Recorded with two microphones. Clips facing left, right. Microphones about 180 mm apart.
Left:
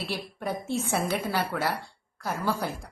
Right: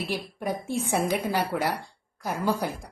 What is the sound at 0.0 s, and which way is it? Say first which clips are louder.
A woman's voice: right 2 dB; 10° right (ahead or behind).